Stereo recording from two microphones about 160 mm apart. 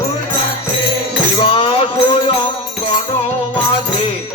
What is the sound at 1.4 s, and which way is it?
Music, 35° left (ahead or behind).